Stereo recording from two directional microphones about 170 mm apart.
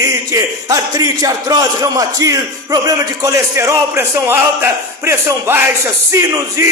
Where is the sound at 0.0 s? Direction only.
20° right (ahead or behind).